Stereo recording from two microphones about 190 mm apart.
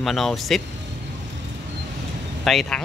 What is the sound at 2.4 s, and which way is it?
Speech, centre (ahead or behind).